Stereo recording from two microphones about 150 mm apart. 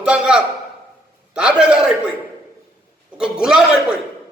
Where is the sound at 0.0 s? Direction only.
5° right (ahead or behind).